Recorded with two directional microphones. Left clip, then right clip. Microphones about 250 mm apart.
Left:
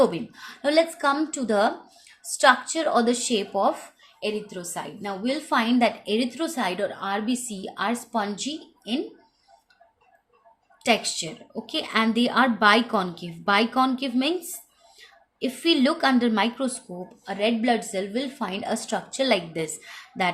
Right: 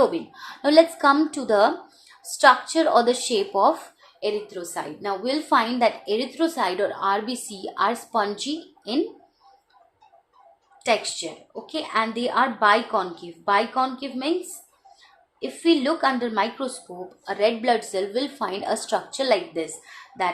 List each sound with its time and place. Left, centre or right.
0.0 s a woman's voice: left
10.8 s a woman's voice: left
15.4 s a woman's voice: left